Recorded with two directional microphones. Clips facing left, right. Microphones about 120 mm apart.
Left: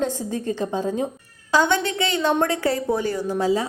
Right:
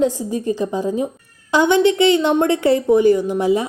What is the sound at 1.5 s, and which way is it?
A woman's voice, 20° right (ahead or behind).